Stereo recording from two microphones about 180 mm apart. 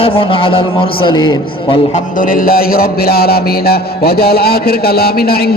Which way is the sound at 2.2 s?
50° left (ahead or behind).